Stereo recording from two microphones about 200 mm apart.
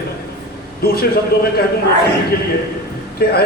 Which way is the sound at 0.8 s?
50° left (ahead or behind).